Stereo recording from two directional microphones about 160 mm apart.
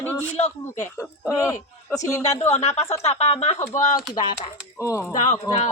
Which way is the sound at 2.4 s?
45° left (ahead or behind).